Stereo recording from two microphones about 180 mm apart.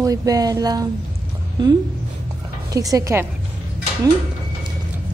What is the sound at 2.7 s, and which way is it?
Speech, 20° right (ahead or behind).